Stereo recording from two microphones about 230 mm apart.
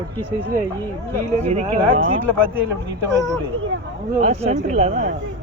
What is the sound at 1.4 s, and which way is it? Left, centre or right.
Speech, right.